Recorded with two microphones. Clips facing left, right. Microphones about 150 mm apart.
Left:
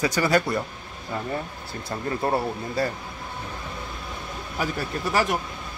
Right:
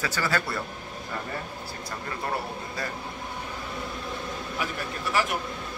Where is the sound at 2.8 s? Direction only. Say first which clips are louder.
Left 9 dB; 30° left (ahead or behind).